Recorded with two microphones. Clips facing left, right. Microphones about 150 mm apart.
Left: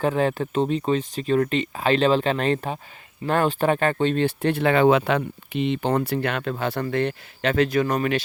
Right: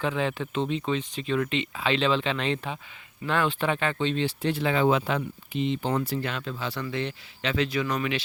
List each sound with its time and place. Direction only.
0.0 s speech: 45° left (ahead or behind)